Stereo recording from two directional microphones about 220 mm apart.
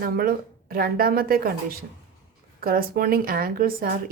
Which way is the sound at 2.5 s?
40° right (ahead or behind).